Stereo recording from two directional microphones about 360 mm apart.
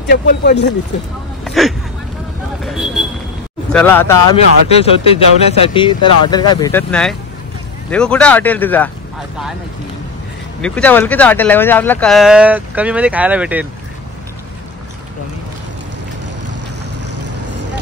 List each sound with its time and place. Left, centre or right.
0.1 s speech: left
1.4 s vehicle: centre
2.6 s a sound: centre
3.7 s speech: centre
10.6 s speech: centre